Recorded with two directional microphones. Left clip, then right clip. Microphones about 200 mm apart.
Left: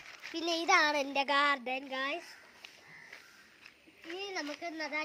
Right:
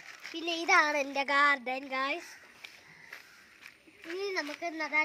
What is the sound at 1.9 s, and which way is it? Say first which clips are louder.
Speech: right 5 dB; 5° left (ahead or behind).